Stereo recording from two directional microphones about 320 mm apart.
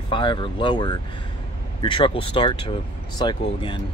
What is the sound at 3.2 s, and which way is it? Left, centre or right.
Speech, centre.